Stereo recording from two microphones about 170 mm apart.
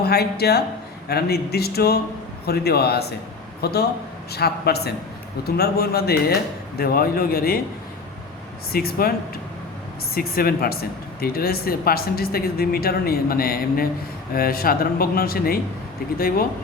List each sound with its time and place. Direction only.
0.0 s speech: 70° left (ahead or behind)
8.7 s speech: 60° left (ahead or behind)
10.2 s speech: 60° left (ahead or behind)